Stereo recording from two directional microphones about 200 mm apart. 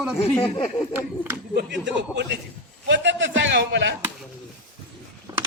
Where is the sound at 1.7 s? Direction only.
60° right (ahead or behind).